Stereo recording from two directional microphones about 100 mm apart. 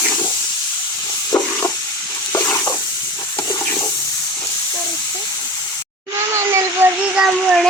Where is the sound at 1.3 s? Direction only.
25° left (ahead or behind).